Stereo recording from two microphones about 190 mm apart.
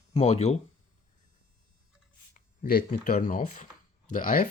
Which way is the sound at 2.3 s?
50° left (ahead or behind).